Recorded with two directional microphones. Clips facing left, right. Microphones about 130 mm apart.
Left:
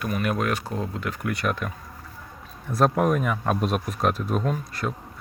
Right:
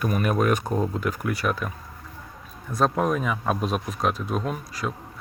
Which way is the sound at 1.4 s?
Centre (ahead or behind).